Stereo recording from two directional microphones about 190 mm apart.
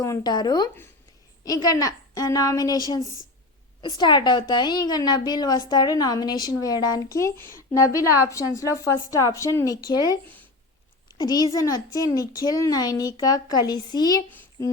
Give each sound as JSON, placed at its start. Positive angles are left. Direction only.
{"t": 0.0, "sound": "a woman's voice", "side_deg": 20}
{"t": 11.2, "sound": "a woman's voice", "side_deg": 20}